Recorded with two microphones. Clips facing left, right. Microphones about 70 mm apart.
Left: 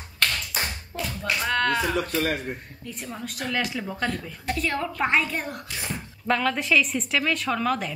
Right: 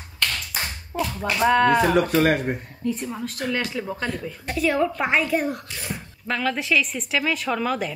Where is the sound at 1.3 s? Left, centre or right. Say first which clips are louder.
Right 7 dB; centre.